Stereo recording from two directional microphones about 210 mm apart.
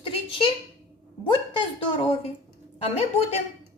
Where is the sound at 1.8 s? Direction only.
30° left (ahead or behind).